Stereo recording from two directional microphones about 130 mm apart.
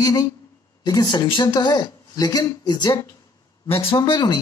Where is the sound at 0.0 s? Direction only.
30° left (ahead or behind).